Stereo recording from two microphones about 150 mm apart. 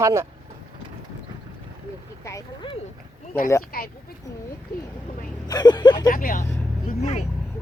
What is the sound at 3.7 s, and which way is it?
Speech, 80° left.